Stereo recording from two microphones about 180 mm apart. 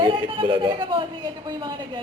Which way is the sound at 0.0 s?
25° right (ahead or behind).